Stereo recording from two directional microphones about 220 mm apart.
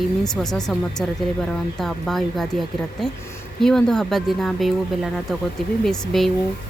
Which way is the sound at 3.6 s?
Centre (ahead or behind).